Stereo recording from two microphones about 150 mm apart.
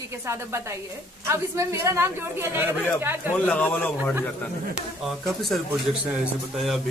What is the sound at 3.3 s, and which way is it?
Speech, 10° left (ahead or behind).